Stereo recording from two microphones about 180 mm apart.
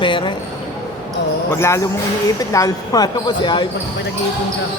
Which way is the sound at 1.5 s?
15° left (ahead or behind).